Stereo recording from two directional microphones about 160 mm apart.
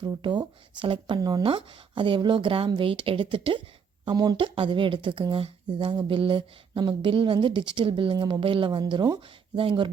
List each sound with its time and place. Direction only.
0.0 s speech: 25° right (ahead or behind)